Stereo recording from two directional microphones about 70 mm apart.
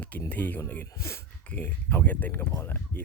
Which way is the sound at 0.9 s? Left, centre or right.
Left.